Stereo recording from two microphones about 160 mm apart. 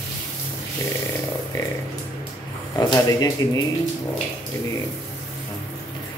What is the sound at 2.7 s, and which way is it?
Speech, 25° left (ahead or behind).